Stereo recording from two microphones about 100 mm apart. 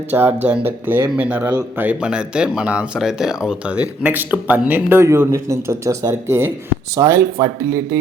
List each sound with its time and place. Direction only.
0.1 s speech: 25° right (ahead or behind)